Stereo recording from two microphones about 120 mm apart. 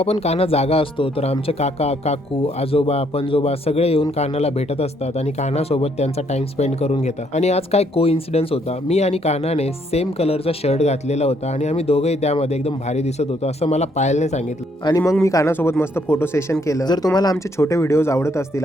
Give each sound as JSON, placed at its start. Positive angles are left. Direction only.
{"t": 0.0, "sound": "speech", "side_deg": 60}
{"t": 14.8, "sound": "speech", "side_deg": 30}